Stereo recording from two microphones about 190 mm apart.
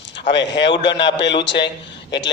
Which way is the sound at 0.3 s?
65° left (ahead or behind).